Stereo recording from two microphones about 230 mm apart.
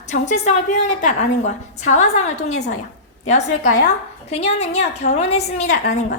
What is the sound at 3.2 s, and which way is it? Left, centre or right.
A woman's voice, left.